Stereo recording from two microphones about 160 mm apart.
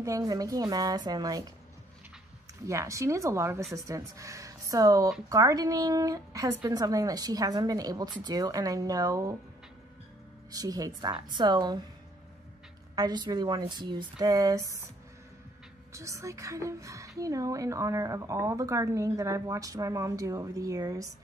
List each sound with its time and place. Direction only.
0.0 s a woman's voice: 20° right (ahead or behind)
2.6 s a woman's voice: 20° right (ahead or behind)
10.5 s a woman's voice: 25° right (ahead or behind)
12.9 s a woman's voice: 25° right (ahead or behind)
15.9 s a woman's voice: 20° right (ahead or behind)